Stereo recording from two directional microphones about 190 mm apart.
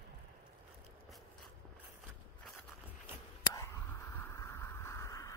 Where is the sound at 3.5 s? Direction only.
15° left (ahead or behind).